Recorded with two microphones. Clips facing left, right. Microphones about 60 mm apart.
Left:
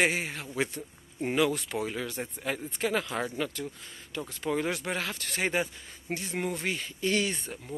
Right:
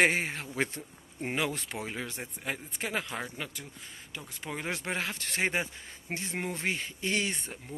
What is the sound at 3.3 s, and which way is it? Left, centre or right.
Speech, centre.